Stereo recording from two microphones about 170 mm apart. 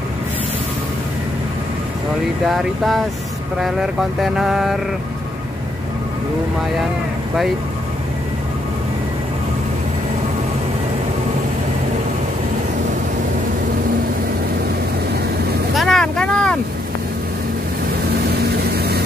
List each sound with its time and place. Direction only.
2.4 s mantra: centre (ahead or behind)
15.7 s boat: centre (ahead or behind)
18.3 s vehicle: 70° right (ahead or behind)